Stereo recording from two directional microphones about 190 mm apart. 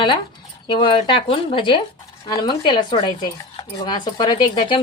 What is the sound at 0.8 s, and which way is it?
Speech, 25° left (ahead or behind).